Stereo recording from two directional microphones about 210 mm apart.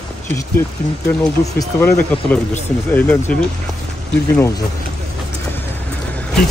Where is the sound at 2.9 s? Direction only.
5° left (ahead or behind).